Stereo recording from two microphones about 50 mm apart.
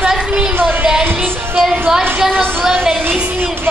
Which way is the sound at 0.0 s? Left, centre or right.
Centre.